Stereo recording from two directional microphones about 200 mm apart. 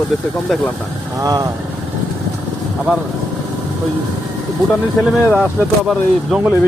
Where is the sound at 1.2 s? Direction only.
20° right (ahead or behind).